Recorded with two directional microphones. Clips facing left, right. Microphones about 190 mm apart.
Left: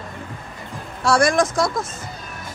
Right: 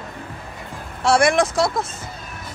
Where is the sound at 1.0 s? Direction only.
25° right (ahead or behind).